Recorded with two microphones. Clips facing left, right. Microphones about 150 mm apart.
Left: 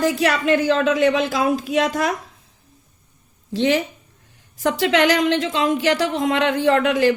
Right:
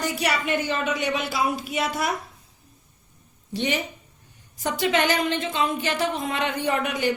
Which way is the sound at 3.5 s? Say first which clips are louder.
Left 7 dB; 90° left.